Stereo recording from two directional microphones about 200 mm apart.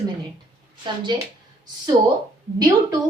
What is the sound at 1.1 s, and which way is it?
Speech, 20° right (ahead or behind).